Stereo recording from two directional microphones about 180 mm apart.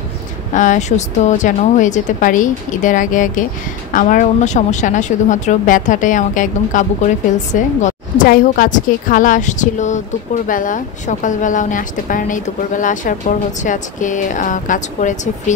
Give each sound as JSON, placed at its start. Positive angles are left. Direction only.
{"t": 0.6, "sound": "a woman's voice", "side_deg": 45}